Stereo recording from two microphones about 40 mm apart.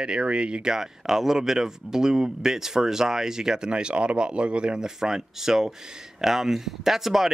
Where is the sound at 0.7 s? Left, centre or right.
Centre.